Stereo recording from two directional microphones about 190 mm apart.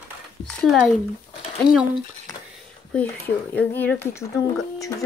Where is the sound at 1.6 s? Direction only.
20° left (ahead or behind).